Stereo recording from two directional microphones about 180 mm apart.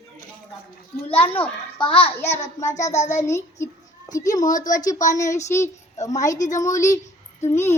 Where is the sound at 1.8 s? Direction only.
25° left (ahead or behind).